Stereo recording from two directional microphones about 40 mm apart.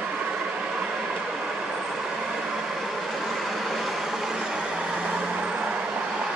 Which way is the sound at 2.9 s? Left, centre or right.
Centre.